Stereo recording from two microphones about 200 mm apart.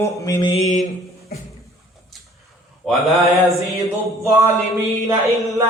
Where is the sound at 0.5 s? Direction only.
35° left (ahead or behind).